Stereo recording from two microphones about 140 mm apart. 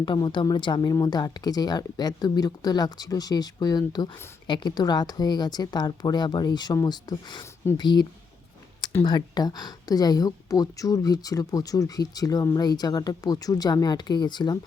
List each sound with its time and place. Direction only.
0.0 s a woman's voice: 35° left (ahead or behind)
9.0 s a woman's voice: 30° left (ahead or behind)